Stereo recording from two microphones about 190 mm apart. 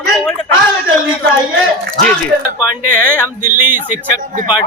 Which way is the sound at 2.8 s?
45° right (ahead or behind).